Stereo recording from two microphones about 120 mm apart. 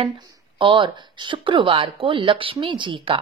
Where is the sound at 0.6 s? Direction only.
45° right (ahead or behind).